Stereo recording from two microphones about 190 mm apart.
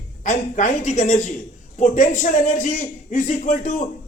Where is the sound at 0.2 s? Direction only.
40° left (ahead or behind).